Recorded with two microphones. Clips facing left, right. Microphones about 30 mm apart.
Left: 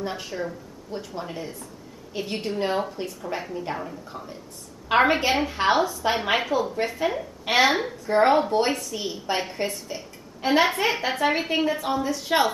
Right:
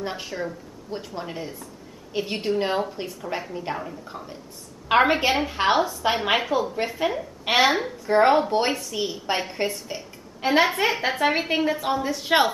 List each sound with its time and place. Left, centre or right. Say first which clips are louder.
0.0 s a woman's voice: even; centre
3.7 s a woman's voice: even; centre; by 8.7 s right
9.1 s a woman's voice: right 1 dB; centre; by 12.4 s right